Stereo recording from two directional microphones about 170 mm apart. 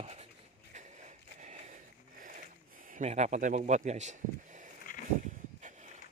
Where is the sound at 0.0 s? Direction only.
40° right (ahead or behind).